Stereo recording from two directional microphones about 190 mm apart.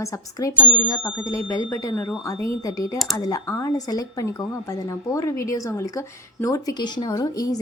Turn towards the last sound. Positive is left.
turn(degrees=20)  # may be behind; listen again after turning